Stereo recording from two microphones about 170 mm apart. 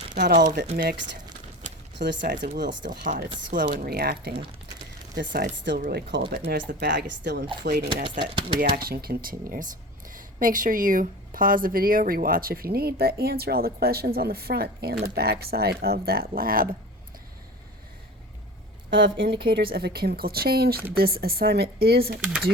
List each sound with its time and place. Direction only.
0.8 s speech: 65° right (ahead or behind)
2.0 s speech: 90° right
2.3 s speech: 50° right (ahead or behind)
5.3 s speech: 80° right
7.6 s speech: 70° right (ahead or behind)
8.2 s speech: 30° right (ahead or behind)
8.5 s speech: 60° right (ahead or behind)
18.9 s speech: 90° right; by 22.2 s 65° right (ahead or behind)
22.2 s speech: 5° right (ahead or behind)